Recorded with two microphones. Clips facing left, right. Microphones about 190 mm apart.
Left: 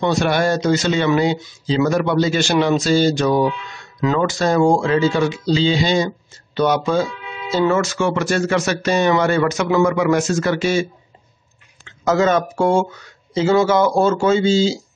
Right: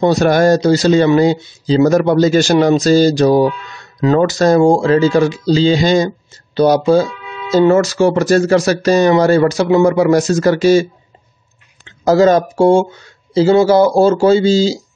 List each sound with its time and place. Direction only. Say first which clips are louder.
0.0 s speech: right 6 dB; 40° right (ahead or behind)
12.0 s speech: right 6 dB; 35° right (ahead or behind)